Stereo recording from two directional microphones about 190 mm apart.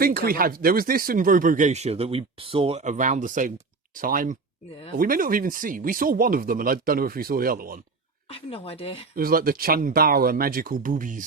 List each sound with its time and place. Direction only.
0.0 s speech: 50° right (ahead or behind)
8.3 s speech: 30° left (ahead or behind)
9.1 s speech: 50° right (ahead or behind)